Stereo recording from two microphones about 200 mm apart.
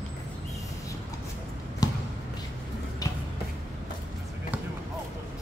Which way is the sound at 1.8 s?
20° left (ahead or behind).